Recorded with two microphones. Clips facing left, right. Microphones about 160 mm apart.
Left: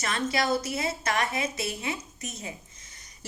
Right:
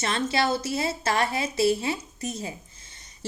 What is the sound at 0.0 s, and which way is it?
A woman's voice, 30° right (ahead or behind).